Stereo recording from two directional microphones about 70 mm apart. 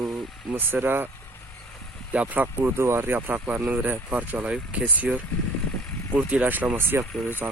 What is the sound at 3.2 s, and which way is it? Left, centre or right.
Speech, right.